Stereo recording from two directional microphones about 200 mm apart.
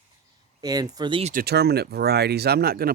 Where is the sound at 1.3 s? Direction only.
50° right (ahead or behind).